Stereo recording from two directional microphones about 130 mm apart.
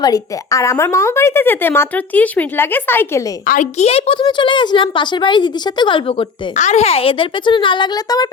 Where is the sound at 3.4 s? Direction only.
80° left; by 6.2 s 40° left (ahead or behind).